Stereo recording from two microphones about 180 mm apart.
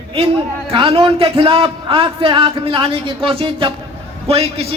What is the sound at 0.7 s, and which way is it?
A man's voice, 30° right (ahead or behind).